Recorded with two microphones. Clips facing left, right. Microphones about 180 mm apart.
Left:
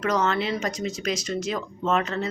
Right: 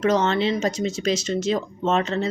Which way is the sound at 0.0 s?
25° right (ahead or behind).